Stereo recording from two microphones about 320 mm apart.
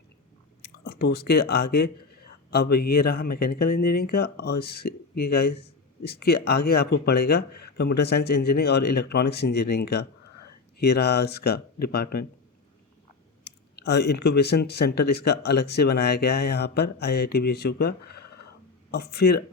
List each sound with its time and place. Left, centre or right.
0.6 s speech: left
13.4 s speech: left